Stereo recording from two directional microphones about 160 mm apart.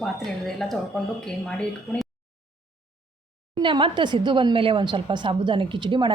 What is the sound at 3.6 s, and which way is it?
Speech, 30° right (ahead or behind).